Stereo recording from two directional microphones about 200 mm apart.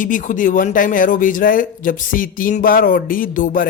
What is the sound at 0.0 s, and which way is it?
A man's voice, 40° left (ahead or behind).